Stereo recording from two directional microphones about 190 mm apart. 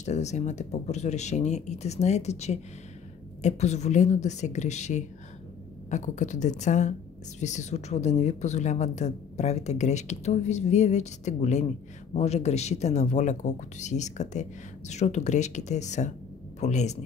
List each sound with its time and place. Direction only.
0.0 s a woman's voice: 35° left (ahead or behind)